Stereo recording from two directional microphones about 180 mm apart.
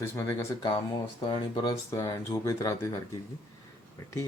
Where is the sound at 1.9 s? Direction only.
15° left (ahead or behind).